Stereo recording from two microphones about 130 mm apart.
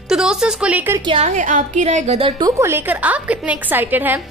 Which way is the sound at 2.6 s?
15° right (ahead or behind).